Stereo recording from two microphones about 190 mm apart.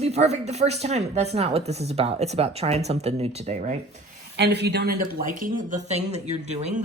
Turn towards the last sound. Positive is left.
turn(degrees=-35)  # may be behind; listen again after turning